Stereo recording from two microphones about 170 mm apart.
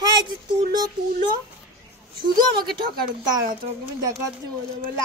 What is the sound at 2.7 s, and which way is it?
Speech, 25° right (ahead or behind).